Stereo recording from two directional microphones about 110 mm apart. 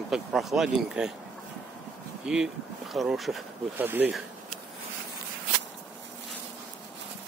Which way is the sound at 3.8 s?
20° right (ahead or behind).